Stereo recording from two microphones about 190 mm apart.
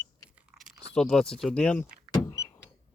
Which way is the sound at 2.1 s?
15° left (ahead or behind).